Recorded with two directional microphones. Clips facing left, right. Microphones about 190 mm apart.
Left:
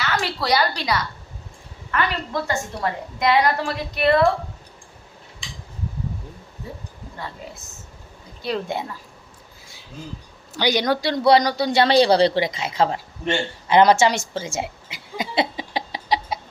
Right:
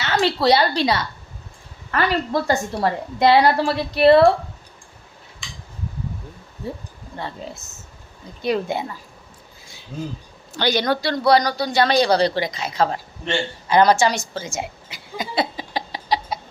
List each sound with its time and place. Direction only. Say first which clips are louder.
0.0 s a woman's voice: right 6 dB; 25° right (ahead or behind)
8.4 s speech: right 4 dB; 15° right (ahead or behind)
8.6 s a woman's voice: right 2 dB; centre (ahead or behind)
10.6 s a woman's voice: even; 15° left (ahead or behind)
13.7 s a sound: left 1 dB; 25° left (ahead or behind)